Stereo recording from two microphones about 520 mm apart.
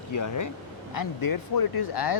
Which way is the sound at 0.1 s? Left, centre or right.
Left.